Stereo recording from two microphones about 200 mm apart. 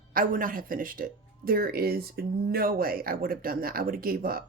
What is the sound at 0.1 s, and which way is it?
Speech, 45° right (ahead or behind).